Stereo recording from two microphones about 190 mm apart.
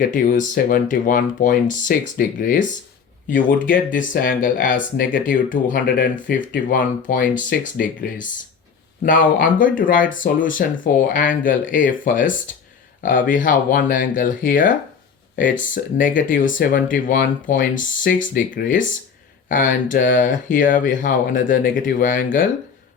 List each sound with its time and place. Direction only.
0.1 s speech: 45° left (ahead or behind)